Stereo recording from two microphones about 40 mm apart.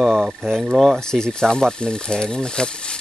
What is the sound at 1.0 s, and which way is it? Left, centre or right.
Speech, centre.